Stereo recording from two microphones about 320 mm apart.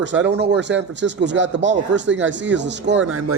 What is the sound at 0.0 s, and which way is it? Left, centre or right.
Speech, right.